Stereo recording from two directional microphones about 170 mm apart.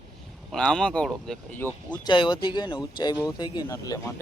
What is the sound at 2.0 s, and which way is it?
Speech, 25° left (ahead or behind).